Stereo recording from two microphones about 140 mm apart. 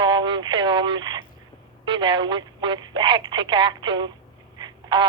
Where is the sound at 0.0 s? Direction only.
35° right (ahead or behind).